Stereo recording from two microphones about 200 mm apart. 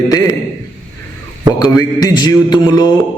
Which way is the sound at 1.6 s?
20° left (ahead or behind).